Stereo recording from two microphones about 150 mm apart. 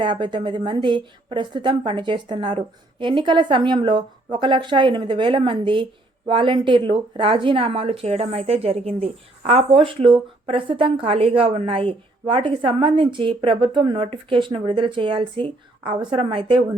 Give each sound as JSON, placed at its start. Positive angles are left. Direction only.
{"t": 0.0, "sound": "a woman's voice", "side_deg": -35}